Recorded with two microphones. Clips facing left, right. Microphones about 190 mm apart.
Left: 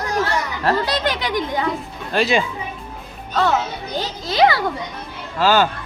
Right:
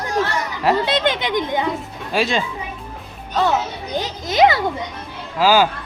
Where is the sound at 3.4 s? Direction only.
15° right (ahead or behind).